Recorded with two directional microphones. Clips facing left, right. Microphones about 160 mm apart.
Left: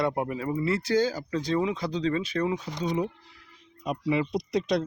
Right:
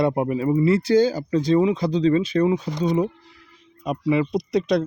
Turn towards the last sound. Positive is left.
turn(degrees=-65)  # may be behind; listen again after turning